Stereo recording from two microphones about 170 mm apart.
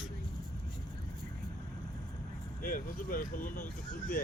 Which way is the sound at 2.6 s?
55° left (ahead or behind).